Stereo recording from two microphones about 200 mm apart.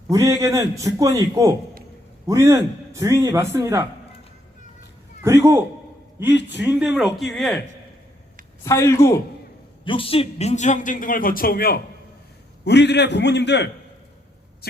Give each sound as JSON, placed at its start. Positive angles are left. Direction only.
{"t": 0.1, "sound": "a man's voice", "side_deg": -15}
{"t": 5.2, "sound": "a man's voice", "side_deg": -15}
{"t": 8.6, "sound": "speech", "side_deg": 15}
{"t": 9.8, "sound": "a man's voice", "side_deg": 25}
{"t": 14.6, "sound": "a sound", "side_deg": 50}